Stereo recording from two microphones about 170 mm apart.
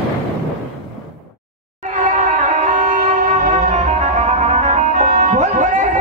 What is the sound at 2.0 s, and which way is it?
Music, 45° right (ahead or behind).